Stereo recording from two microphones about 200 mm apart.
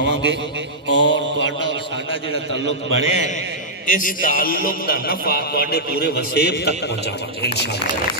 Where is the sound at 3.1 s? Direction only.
35° left (ahead or behind); by 7.8 s 55° left (ahead or behind).